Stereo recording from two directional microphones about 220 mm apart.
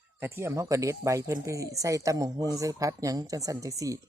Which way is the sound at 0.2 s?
10° right (ahead or behind).